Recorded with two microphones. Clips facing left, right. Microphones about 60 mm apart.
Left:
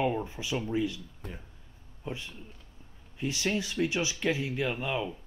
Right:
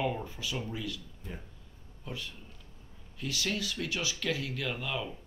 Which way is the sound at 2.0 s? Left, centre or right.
Left.